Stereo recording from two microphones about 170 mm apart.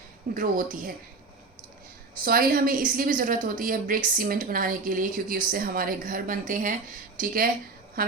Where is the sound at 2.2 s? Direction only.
60° right (ahead or behind).